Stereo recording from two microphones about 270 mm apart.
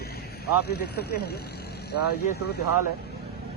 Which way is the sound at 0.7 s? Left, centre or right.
Left.